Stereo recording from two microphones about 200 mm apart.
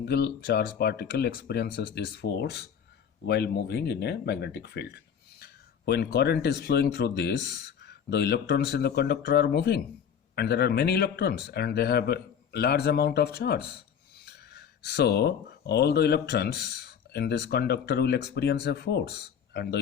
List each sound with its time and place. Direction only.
0.0 s speech: 55° left (ahead or behind)